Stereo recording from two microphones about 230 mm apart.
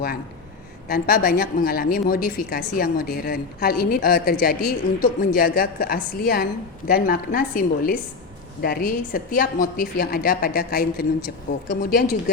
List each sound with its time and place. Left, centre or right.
0.9 s a woman's voice: left